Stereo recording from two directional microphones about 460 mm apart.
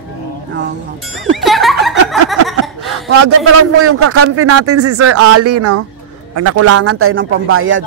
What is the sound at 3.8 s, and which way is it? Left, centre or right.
A man's voice, right.